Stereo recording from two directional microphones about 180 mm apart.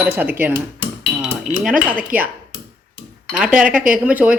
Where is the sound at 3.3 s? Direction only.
5° right (ahead or behind).